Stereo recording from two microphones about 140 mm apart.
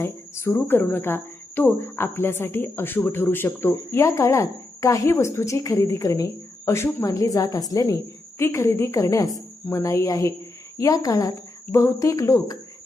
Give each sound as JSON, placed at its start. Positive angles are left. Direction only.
{"t": 0.0, "sound": "speech", "side_deg": 15}